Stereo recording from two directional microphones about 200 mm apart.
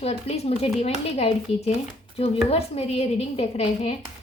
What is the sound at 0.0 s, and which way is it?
Speech, 30° left (ahead or behind).